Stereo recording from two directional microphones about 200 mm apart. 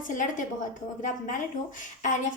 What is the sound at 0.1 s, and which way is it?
Speech, 40° left (ahead or behind).